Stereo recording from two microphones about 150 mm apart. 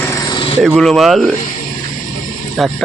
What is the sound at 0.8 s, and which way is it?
Speech, centre (ahead or behind).